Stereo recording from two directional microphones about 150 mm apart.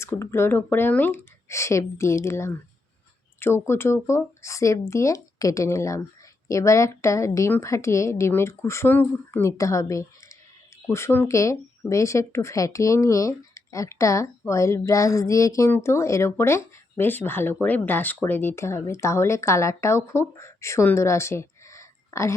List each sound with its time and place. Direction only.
0.0 s speech: 15° left (ahead or behind)